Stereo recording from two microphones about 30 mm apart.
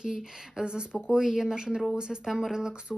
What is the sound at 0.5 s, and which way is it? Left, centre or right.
Speech, right.